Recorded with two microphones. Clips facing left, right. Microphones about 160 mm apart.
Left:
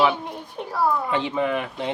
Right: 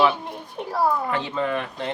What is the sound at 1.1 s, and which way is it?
Speech, 15° left (ahead or behind).